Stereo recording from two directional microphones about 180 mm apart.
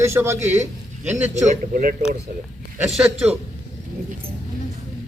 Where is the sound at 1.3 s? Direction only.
40° right (ahead or behind).